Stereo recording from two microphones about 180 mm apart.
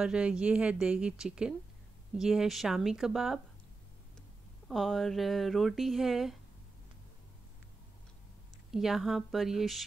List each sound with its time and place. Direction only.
0.0 s speech: 5° right (ahead or behind)
4.6 s speech: centre (ahead or behind)
8.7 s speech: centre (ahead or behind)